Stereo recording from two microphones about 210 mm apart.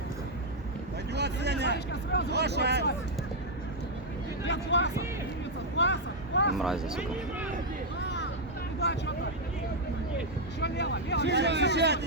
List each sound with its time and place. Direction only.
1.1 s vehicle: 55° right (ahead or behind)
2.3 s speech: 50° right (ahead or behind)
4.4 s speech: 60° left (ahead or behind)
5.7 s vehicle: 60° left (ahead or behind)
6.6 s speech: centre (ahead or behind)
8.0 s vehicle: 55° left (ahead or behind)
8.8 s speech: 55° left (ahead or behind)
10.6 s speech: 55° left (ahead or behind)
11.3 s speech: 55° right (ahead or behind)